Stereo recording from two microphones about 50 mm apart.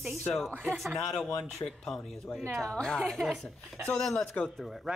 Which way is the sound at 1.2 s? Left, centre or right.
Centre.